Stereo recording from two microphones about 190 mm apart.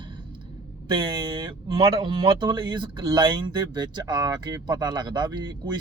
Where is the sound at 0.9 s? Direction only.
25° right (ahead or behind).